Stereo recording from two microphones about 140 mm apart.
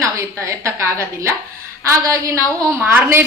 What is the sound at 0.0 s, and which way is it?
A woman's voice, 20° right (ahead or behind).